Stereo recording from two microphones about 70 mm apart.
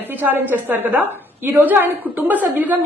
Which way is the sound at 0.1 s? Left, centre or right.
Right.